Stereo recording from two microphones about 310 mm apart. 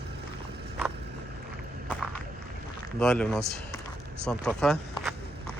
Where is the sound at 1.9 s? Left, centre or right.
Centre.